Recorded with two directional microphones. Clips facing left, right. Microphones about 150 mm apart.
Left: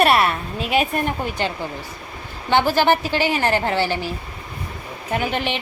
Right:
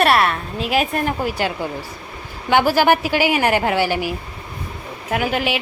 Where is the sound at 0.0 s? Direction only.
Centre (ahead or behind).